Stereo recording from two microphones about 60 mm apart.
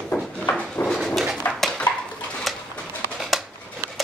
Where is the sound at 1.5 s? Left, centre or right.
Left.